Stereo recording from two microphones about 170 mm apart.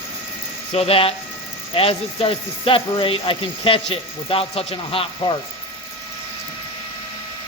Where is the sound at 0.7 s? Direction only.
35° left (ahead or behind).